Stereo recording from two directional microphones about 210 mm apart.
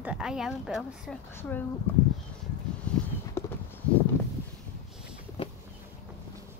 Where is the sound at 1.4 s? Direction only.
10° left (ahead or behind).